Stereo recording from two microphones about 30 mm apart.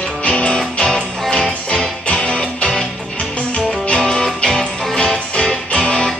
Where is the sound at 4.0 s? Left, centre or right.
Left.